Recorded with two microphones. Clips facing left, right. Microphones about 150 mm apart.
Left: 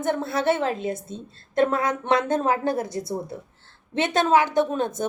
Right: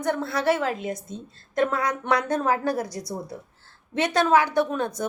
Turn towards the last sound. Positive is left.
turn(degrees=25)  # may be behind; listen again after turning